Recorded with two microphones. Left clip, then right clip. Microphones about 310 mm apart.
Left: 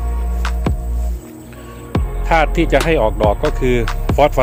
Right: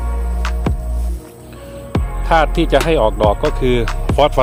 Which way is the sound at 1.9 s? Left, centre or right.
Centre.